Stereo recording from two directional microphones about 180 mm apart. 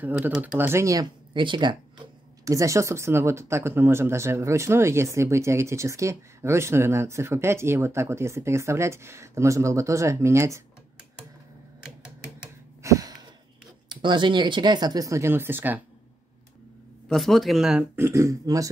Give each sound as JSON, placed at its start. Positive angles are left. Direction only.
{"t": 0.0, "sound": "speech", "side_deg": -10}
{"t": 12.8, "sound": "a sound", "side_deg": -20}
{"t": 13.8, "sound": "speech", "side_deg": -25}
{"t": 17.1, "sound": "a man's voice", "side_deg": 0}
{"t": 17.9, "sound": "speech", "side_deg": -15}